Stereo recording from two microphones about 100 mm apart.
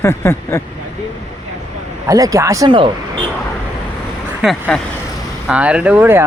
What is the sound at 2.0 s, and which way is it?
Speech, 35° right (ahead or behind).